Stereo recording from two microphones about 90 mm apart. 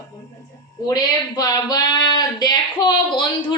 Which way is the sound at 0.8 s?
45° left (ahead or behind).